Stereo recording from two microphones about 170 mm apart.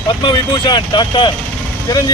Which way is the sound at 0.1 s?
25° left (ahead or behind).